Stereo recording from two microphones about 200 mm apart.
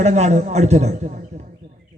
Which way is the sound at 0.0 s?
35° right (ahead or behind).